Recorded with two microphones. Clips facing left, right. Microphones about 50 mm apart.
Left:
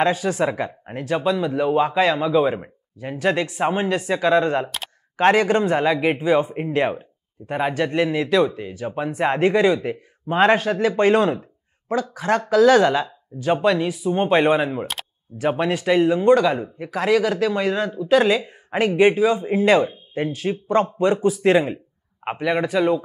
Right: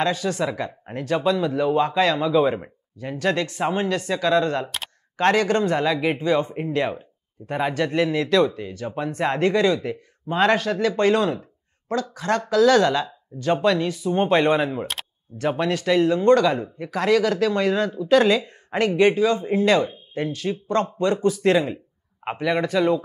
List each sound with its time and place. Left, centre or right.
0.0 s speech: centre
0.7 s speech: centre
4.6 s speech: centre
5.1 s speech: centre
7.4 s speech: centre; by 11.4 s left
11.9 s speech: centre